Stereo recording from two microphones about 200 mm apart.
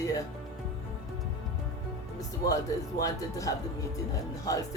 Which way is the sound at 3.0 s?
15° left (ahead or behind).